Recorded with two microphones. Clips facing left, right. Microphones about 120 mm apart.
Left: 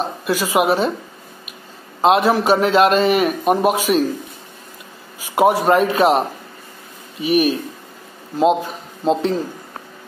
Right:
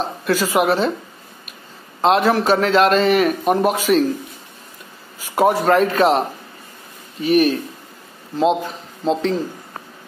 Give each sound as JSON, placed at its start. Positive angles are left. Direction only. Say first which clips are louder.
{"t": 0.2, "sound": "a man's voice", "louder": "even", "side_deg": 15}
{"t": 2.0, "sound": "a man's voice", "louder": "left 1 dB", "side_deg": 15}
{"t": 5.3, "sound": "a man's voice", "louder": "left 1 dB", "side_deg": 15}
{"t": 9.0, "sound": "a man's voice", "louder": "left 1 dB", "side_deg": 10}